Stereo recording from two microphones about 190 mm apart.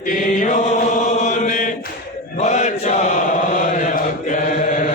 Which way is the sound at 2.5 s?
40° left (ahead or behind).